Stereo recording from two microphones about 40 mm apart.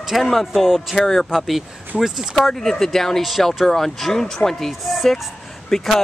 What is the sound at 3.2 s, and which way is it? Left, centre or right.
Speech, centre.